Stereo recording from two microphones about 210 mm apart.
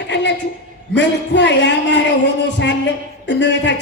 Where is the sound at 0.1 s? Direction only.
55° left (ahead or behind).